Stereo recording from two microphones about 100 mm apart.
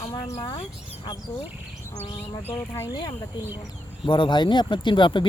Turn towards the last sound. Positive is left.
turn(degrees=55)  # may be behind; listen again after turning